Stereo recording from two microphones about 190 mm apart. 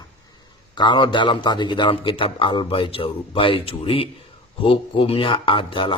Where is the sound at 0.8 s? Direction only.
25° left (ahead or behind).